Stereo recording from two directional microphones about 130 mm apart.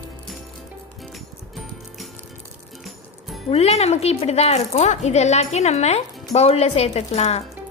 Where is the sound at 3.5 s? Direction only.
55° left (ahead or behind).